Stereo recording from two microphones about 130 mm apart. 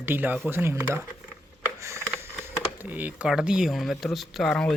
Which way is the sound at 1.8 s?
25° right (ahead or behind).